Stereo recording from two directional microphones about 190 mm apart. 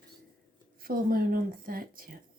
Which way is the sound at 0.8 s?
50° right (ahead or behind).